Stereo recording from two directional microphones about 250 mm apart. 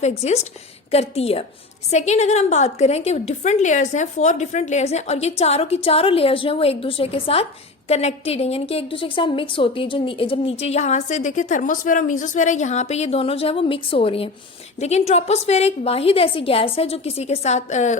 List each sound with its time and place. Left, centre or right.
0.0 s a woman's voice: left